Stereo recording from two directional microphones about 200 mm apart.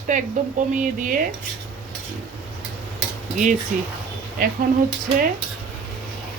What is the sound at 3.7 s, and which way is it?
Speech, 40° right (ahead or behind).